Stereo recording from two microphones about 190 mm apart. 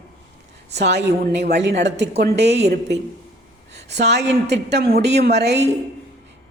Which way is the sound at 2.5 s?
35° right (ahead or behind).